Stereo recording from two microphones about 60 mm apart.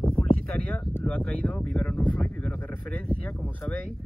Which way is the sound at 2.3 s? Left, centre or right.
Left.